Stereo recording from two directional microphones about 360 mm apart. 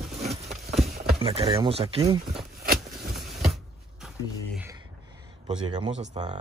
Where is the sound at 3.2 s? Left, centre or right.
Centre.